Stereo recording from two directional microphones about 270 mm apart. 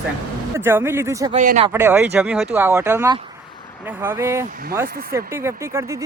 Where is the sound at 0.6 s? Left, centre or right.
Centre.